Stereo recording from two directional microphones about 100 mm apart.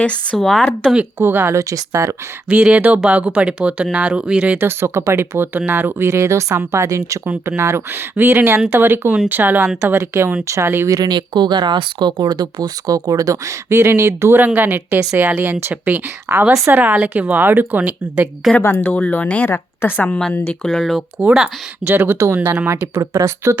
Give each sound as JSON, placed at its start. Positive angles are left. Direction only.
{"t": 0.0, "sound": "speech", "side_deg": 10}
{"t": 0.9, "sound": "speech", "side_deg": -20}
{"t": 1.5, "sound": "speech", "side_deg": -35}
{"t": 2.5, "sound": "a woman's voice", "side_deg": -10}
{"t": 4.5, "sound": "a woman's voice", "side_deg": -25}
{"t": 18.5, "sound": "speech", "side_deg": 15}
{"t": 20.7, "sound": "speech", "side_deg": 0}
{"t": 21.8, "sound": "speech", "side_deg": -20}
{"t": 23.0, "sound": "speech", "side_deg": -35}